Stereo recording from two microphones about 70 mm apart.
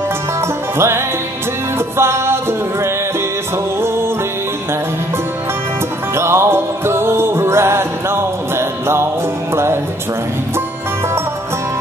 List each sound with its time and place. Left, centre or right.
0.7 s music: right
6.1 s music: right